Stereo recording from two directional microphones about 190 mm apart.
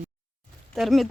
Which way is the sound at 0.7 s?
Centre (ahead or behind).